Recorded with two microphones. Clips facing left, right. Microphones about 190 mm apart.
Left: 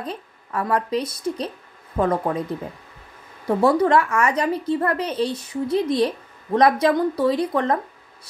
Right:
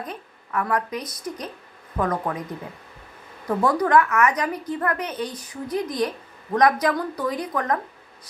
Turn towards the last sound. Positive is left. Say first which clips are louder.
# left 5 dB
turn(degrees=30)  # may be behind; listen again after turning